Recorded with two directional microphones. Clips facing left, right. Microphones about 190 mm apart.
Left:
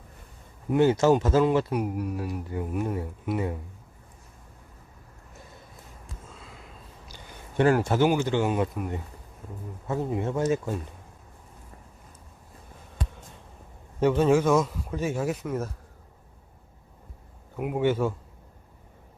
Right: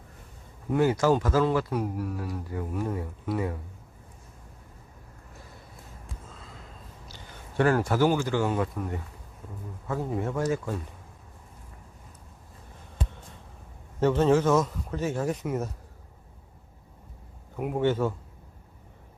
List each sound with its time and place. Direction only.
0.7 s speech: 25° left (ahead or behind)
7.1 s speech: 20° left (ahead or behind)
14.0 s a man's voice: 10° left (ahead or behind)
17.6 s speech: 5° left (ahead or behind)